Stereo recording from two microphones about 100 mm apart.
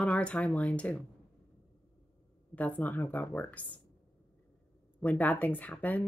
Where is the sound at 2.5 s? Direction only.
15° left (ahead or behind).